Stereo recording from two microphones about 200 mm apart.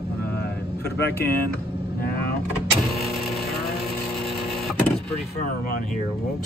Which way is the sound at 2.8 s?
Centre (ahead or behind).